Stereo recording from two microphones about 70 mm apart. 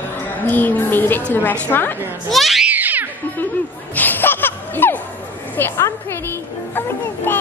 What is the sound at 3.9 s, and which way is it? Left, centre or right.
Music, left.